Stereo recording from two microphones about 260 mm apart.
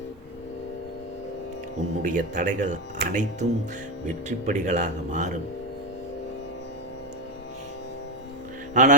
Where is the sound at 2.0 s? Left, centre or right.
Right.